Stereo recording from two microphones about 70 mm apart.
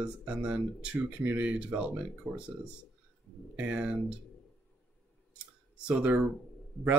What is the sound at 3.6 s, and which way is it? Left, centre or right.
Speech, right.